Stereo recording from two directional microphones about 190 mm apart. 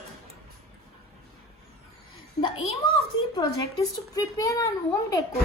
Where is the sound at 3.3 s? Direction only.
20° left (ahead or behind).